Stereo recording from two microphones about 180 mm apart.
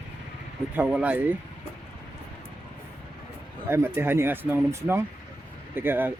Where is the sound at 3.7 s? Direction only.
15° right (ahead or behind).